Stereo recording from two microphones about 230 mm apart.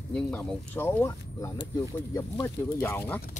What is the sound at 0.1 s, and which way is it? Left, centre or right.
Speech, centre.